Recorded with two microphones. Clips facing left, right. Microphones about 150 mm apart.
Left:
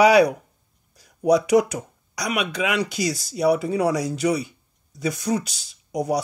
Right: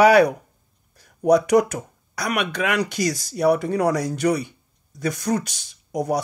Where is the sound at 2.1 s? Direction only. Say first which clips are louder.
Right 1 dB; 15° left (ahead or behind).